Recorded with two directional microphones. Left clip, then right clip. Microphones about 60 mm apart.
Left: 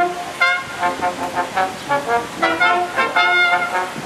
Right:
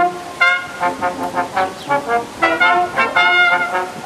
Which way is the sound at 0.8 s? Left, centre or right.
Centre.